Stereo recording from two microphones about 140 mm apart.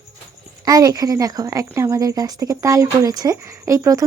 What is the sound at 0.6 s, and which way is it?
Speech, 25° right (ahead or behind).